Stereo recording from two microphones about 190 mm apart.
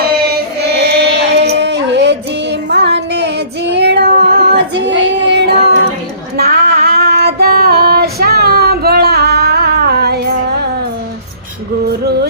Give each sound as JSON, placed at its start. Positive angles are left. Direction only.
{"t": 0.0, "sound": "a sound", "side_deg": -55}
{"t": 1.3, "sound": "child singing", "side_deg": -65}
{"t": 6.3, "sound": "female singing", "side_deg": -55}
{"t": 12.0, "sound": "yodeling", "side_deg": -60}